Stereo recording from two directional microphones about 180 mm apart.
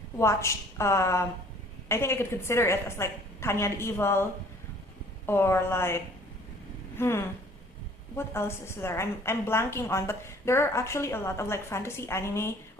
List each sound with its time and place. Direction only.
0.2 s a woman's voice: 15° left (ahead or behind)